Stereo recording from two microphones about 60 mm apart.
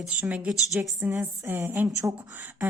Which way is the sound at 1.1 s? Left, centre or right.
Right.